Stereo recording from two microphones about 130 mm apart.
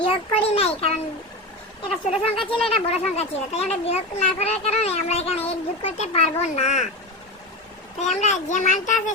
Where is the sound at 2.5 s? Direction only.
50° left (ahead or behind); by 6.9 s 65° left (ahead or behind).